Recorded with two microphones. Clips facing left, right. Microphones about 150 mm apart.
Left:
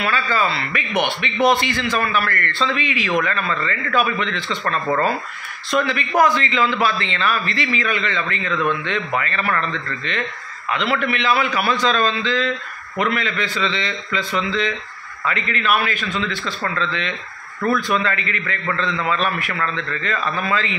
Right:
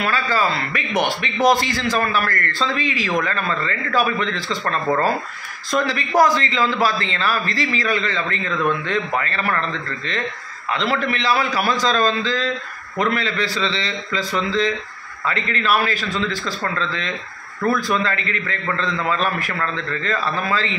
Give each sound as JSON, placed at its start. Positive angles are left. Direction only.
{"t": 0.0, "sound": "a man's voice", "side_deg": -40}